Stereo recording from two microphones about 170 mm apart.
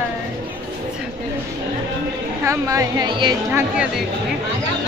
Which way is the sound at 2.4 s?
15° right (ahead or behind).